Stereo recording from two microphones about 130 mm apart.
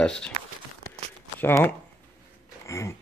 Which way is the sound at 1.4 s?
15° left (ahead or behind).